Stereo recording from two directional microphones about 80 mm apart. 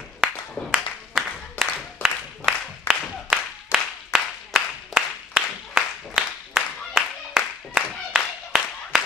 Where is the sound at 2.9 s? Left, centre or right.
Left.